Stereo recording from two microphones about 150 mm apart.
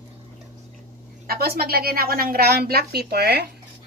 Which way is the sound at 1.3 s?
90° right.